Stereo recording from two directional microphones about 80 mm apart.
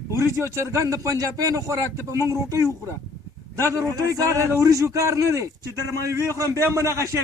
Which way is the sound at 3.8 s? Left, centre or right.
Right.